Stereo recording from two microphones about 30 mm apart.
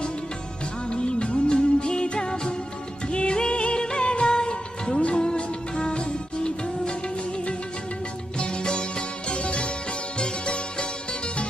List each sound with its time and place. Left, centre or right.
0.9 s music of bollywood: left
3.1 s music: left
8.4 s music: left